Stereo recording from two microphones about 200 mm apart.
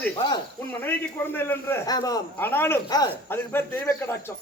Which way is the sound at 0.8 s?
10° left (ahead or behind).